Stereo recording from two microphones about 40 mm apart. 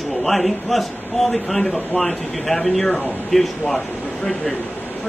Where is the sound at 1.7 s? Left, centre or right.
Left.